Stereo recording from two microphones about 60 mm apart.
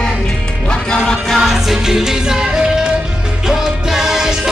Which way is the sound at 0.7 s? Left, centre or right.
Centre.